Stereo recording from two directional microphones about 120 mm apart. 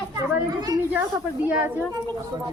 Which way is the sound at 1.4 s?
10° right (ahead or behind).